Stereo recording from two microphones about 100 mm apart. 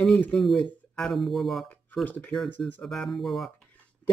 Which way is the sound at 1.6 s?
15° left (ahead or behind).